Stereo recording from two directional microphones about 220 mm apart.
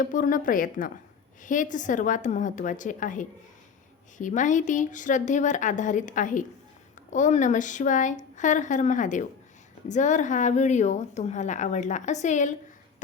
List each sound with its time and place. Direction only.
0.0 s a woman's voice: 35° left (ahead or behind)